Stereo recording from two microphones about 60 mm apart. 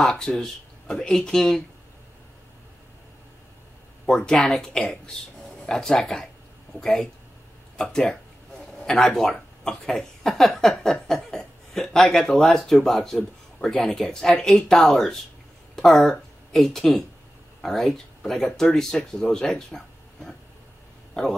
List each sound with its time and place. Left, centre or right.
0.0 s speech: centre
4.1 s speech: centre